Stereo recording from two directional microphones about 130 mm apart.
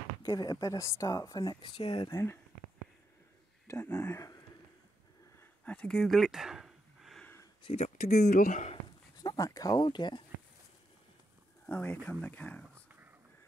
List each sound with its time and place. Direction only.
0.2 s speech: 30° left (ahead or behind); by 2.0 s 45° left (ahead or behind)
2.0 s speech: 20° left (ahead or behind)
4.0 s speech: 25° left (ahead or behind)
5.4 s a sound: 10° left (ahead or behind)
7.6 s speech: 60° left (ahead or behind); by 8.7 s 80° left
9.2 s speech: 30° left (ahead or behind)
11.6 s speech: 10° left (ahead or behind)
12.7 s a sound: 15° right (ahead or behind)